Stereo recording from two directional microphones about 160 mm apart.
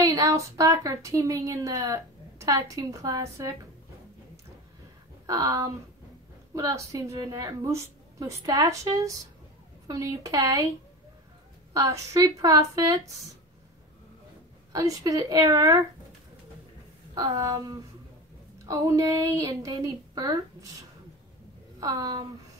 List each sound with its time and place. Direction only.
0.0 s speech: 25° right (ahead or behind)
5.2 s speech: 25° right (ahead or behind)
11.7 s speech: 20° right (ahead or behind)
14.7 s speech: 20° right (ahead or behind)
17.1 s speech: 20° right (ahead or behind)
21.7 s speech: 25° right (ahead or behind)